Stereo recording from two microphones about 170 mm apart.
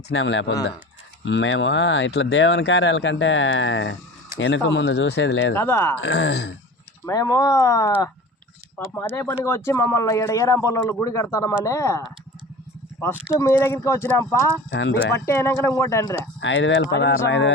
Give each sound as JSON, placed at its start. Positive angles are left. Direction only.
{"t": 0.1, "sound": "speech", "side_deg": 90}
{"t": 5.5, "sound": "speech", "side_deg": 15}
{"t": 6.0, "sound": "speech", "side_deg": 85}
{"t": 7.0, "sound": "speech", "side_deg": 20}
{"t": 13.4, "sound": "speech", "side_deg": 15}
{"t": 14.7, "sound": "speech", "side_deg": 90}
{"t": 15.1, "sound": "speech", "side_deg": 15}
{"t": 16.4, "sound": "speech", "side_deg": 90}